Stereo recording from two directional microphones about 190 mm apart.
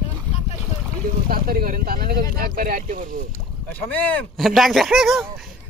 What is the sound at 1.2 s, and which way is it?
Speech, 50° right (ahead or behind).